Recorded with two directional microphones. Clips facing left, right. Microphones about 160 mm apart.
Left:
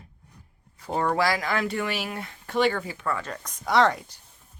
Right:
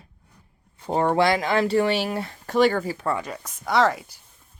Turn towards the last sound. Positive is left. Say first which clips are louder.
# right 1 dB
turn(degrees=-5)  # may be behind; listen again after turning